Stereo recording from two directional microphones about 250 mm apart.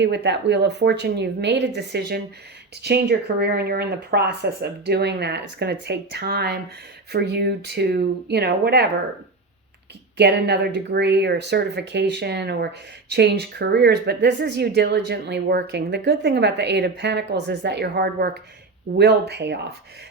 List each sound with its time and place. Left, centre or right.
0.0 s speech: right
10.2 s speech: right